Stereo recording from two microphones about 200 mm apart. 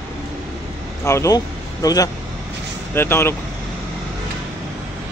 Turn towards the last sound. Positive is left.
turn(degrees=10)  # may be behind; listen again after turning